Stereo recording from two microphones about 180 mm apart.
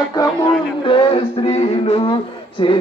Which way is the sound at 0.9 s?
30° left (ahead or behind).